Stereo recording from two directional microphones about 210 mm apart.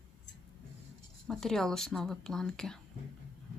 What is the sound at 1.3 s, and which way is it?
Speech, centre (ahead or behind).